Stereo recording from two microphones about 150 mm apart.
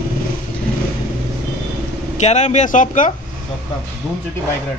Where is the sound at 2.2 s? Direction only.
50° left (ahead or behind).